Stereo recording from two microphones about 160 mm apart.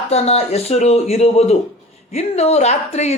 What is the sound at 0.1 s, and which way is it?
Speech, 40° left (ahead or behind).